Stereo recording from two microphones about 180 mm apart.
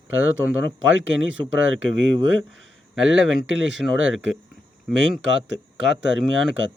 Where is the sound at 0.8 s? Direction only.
90° right.